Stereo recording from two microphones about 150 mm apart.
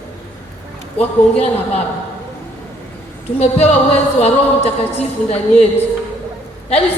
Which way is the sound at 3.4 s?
45° left (ahead or behind).